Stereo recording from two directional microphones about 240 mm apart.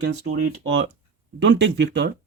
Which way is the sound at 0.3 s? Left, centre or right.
Right.